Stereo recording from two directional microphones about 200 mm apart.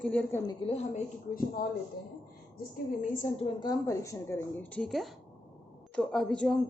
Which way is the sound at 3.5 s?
20° left (ahead or behind).